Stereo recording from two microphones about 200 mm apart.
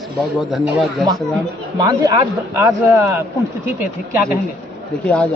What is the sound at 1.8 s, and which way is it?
A man's voice, 15° right (ahead or behind).